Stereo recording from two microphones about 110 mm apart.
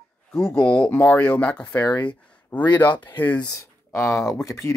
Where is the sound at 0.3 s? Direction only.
5° left (ahead or behind).